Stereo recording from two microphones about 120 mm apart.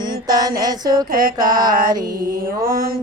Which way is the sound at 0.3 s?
30° right (ahead or behind).